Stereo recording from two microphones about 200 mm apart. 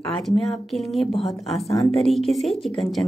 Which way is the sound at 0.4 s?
Centre (ahead or behind).